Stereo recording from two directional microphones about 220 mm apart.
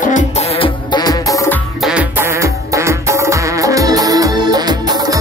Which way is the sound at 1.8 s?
5° right (ahead or behind).